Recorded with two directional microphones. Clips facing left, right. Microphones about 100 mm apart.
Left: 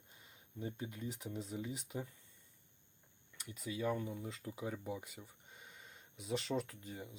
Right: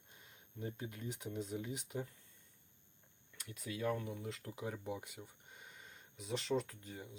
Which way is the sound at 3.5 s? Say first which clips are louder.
Left 1 dB; centre (ahead or behind).